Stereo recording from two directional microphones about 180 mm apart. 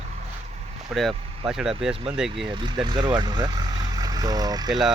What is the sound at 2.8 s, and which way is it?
Speech, 25° right (ahead or behind).